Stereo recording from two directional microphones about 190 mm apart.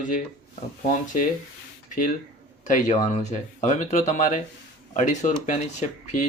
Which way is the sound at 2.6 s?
40° left (ahead or behind).